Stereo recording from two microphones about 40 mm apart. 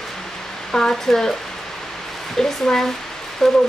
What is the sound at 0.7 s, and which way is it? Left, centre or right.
Speech, centre.